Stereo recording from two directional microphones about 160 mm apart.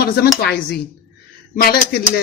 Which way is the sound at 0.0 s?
70° left (ahead or behind).